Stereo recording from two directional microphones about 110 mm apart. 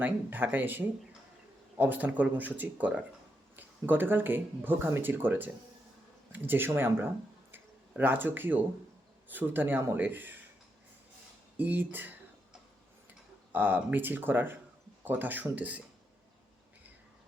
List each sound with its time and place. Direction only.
0.0 s speech: 15° right (ahead or behind)
7.5 s a sound: 15° right (ahead or behind)
9.3 s speech: 15° right (ahead or behind)
11.5 s speech: 15° right (ahead or behind)